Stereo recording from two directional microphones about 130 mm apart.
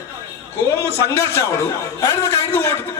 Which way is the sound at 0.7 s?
20° left (ahead or behind).